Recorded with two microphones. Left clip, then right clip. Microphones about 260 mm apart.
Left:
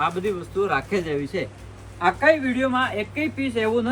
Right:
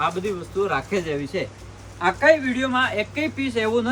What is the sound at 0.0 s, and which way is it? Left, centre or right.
Speech, centre.